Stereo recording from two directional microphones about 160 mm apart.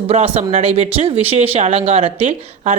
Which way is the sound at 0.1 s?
40° right (ahead or behind).